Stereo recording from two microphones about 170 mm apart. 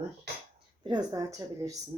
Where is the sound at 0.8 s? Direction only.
25° right (ahead or behind).